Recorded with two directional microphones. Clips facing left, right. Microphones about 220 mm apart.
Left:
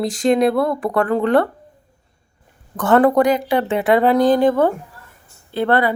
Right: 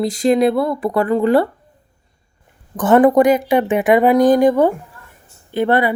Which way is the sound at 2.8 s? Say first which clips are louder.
Right 3 dB; 20° right (ahead or behind).